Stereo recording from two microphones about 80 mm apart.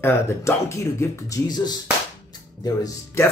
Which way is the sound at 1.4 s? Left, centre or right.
Left.